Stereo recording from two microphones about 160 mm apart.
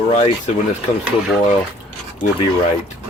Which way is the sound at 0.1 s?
45° left (ahead or behind).